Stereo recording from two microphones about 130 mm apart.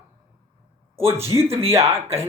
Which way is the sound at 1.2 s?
20° right (ahead or behind).